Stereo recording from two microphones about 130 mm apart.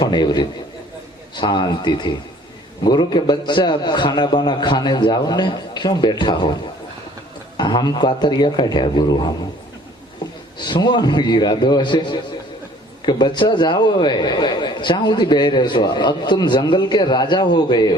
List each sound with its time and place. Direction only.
0.0 s a man's voice: 35° left (ahead or behind)
10.6 s a man's voice: 35° left (ahead or behind)